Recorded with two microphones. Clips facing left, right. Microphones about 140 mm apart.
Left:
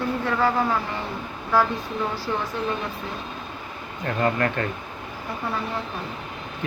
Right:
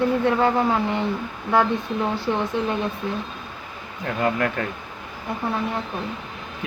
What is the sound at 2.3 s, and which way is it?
Speech, 15° right (ahead or behind).